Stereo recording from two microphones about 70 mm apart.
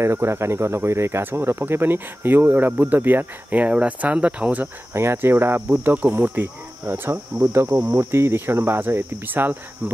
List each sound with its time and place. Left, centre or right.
0.0 s speech: right; by 4.6 s centre
4.9 s speech: right